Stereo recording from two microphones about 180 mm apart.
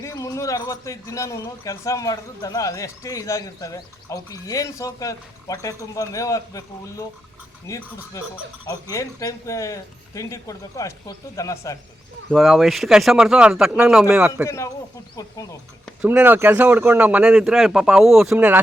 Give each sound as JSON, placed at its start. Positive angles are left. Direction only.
{"t": 0.0, "sound": "a man's voice", "side_deg": 15}
{"t": 12.3, "sound": "speech", "side_deg": 0}
{"t": 14.4, "sound": "a man's voice", "side_deg": 15}
{"t": 15.9, "sound": "speech", "side_deg": -5}